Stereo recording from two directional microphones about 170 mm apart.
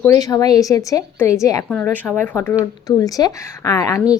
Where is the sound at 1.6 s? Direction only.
10° left (ahead or behind).